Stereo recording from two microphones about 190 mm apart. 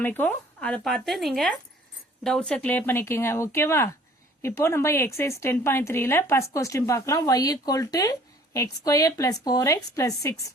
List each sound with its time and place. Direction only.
0.0 s a woman's voice: 10° left (ahead or behind)